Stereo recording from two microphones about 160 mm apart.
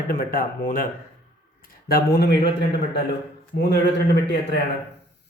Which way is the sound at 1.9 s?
80° left.